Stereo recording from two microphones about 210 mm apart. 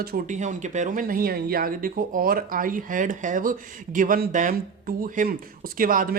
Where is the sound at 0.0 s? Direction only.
40° right (ahead or behind).